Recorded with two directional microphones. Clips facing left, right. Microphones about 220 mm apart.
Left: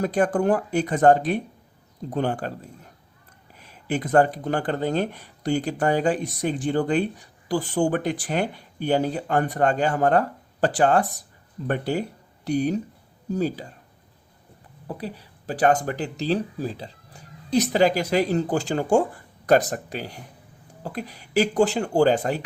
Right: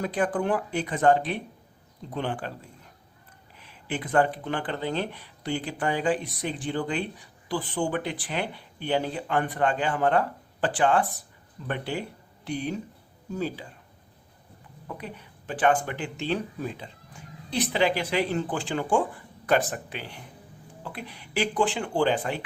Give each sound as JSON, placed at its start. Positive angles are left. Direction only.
{"t": 0.0, "sound": "speech", "side_deg": 45}
{"t": 3.6, "sound": "speech", "side_deg": 45}
{"t": 14.8, "sound": "speech", "side_deg": 35}